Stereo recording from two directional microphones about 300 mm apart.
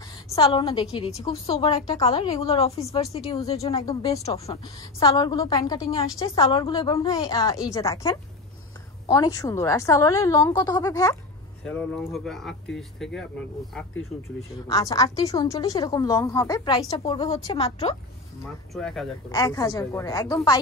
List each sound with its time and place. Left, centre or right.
0.3 s speech: centre
14.7 s speech: centre
18.7 s speech: centre
19.3 s speech: centre